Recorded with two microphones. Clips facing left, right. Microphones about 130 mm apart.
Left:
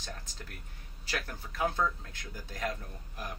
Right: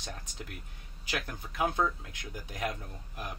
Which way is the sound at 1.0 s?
15° right (ahead or behind).